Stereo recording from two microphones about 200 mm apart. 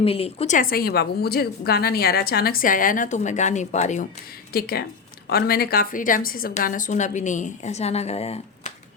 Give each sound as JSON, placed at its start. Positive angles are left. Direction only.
{"t": 0.0, "sound": "a woman's voice", "side_deg": 30}
{"t": 4.5, "sound": "a woman's voice", "side_deg": 50}